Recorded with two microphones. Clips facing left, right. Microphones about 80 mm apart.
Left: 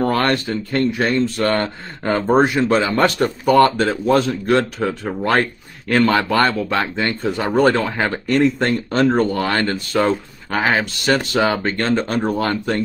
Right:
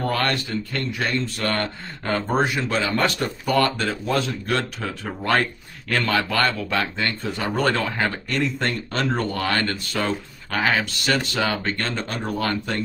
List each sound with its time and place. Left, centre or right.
0.0 s speech: left
1.5 s speech: left
4.5 s speech: left
5.3 s speech: left; by 8.1 s centre
8.4 s speech: left
9.1 s speech: centre